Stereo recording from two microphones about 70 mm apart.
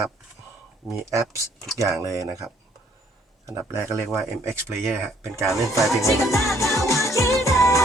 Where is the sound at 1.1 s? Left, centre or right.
Right.